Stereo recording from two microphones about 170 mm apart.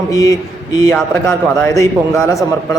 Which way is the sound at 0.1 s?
20° left (ahead or behind).